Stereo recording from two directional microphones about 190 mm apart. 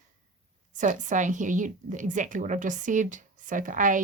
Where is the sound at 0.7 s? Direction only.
40° right (ahead or behind).